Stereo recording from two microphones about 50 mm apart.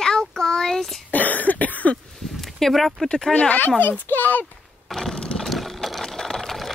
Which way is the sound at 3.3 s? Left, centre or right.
Left.